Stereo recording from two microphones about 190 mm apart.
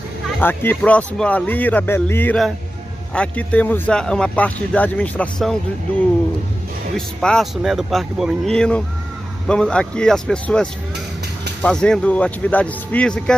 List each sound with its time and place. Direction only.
0.4 s speech: 10° left (ahead or behind)
7.0 s speech: 5° left (ahead or behind)